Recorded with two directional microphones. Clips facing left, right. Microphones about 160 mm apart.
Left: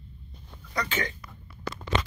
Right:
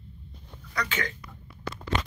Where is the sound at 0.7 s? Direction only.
25° left (ahead or behind).